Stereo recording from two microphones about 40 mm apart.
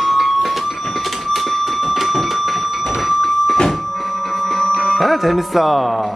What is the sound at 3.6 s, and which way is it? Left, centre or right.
Music, centre.